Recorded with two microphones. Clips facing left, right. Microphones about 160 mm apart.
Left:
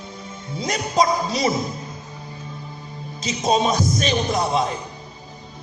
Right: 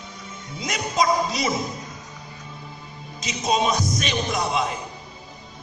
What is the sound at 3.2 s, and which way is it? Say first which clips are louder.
Speech: left 3 dB; 30° left (ahead or behind).